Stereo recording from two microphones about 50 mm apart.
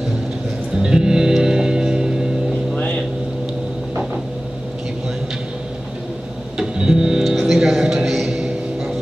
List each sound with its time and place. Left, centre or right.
0.7 s music: centre
6.8 s music: centre